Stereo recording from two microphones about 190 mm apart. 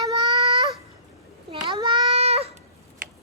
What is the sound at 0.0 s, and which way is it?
Baby cry, 20° right (ahead or behind).